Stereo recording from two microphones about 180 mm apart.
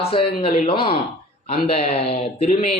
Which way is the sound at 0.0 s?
30° left (ahead or behind).